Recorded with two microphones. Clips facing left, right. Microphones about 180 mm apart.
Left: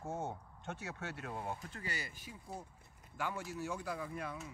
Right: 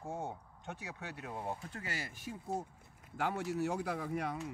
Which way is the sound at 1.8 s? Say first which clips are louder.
Right 2 dB; 90° right.